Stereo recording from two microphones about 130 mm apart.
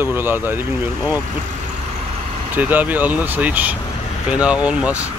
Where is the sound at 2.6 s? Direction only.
15° right (ahead or behind).